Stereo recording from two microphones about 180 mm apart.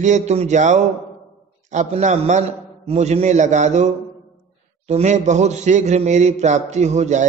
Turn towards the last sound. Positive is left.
turn(degrees=-40)  # may be behind; listen again after turning